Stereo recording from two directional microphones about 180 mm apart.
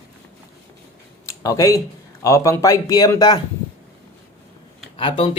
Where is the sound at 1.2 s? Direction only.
20° left (ahead or behind).